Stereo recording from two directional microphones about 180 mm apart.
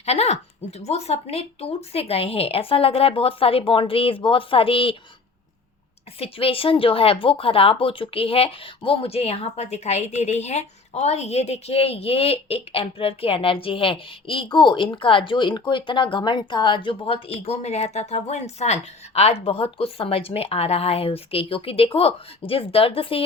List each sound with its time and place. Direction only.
0.0 s speech: 35° left (ahead or behind)
6.1 s speech: 30° left (ahead or behind)